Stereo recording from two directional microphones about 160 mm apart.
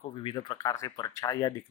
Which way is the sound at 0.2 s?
30° left (ahead or behind).